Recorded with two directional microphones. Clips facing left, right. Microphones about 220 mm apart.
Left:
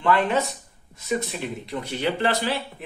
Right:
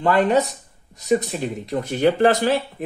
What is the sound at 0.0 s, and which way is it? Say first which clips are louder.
Speech: right 4 dB; 40° right (ahead or behind).